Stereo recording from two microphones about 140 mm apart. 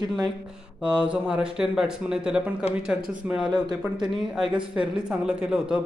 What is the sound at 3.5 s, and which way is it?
Speech, 30° right (ahead or behind).